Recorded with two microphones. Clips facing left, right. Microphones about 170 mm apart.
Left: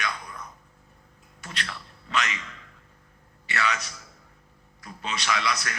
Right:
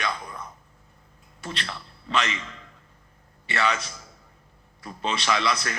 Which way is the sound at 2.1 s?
30° right (ahead or behind).